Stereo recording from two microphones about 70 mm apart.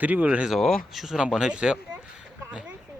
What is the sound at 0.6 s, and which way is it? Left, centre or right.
Speech, centre.